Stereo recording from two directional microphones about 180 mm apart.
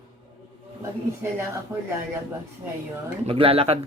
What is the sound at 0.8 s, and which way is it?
Speech, 15° right (ahead or behind).